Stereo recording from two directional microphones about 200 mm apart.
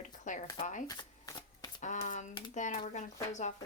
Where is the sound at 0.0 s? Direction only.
40° left (ahead or behind).